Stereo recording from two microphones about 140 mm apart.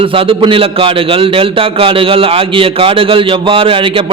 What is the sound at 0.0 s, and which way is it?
A man's voice, 40° right (ahead or behind).